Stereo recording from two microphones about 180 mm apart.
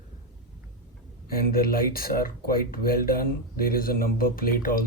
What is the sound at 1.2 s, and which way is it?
A man's voice, 55° left (ahead or behind).